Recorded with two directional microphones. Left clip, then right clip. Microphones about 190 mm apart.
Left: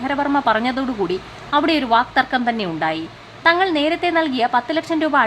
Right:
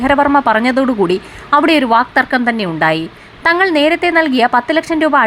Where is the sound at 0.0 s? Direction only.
25° right (ahead or behind).